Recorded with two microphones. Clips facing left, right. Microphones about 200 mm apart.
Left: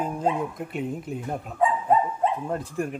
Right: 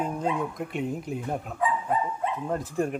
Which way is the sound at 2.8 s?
20° right (ahead or behind).